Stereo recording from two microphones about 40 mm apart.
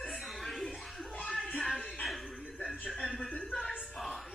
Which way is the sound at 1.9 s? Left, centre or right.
Centre.